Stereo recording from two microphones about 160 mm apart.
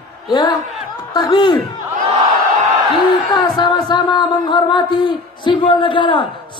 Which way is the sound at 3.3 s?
25° left (ahead or behind).